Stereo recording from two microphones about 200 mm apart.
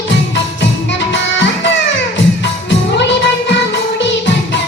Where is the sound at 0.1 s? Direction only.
65° left (ahead or behind).